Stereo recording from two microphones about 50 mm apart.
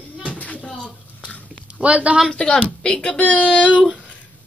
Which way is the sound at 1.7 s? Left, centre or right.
Right.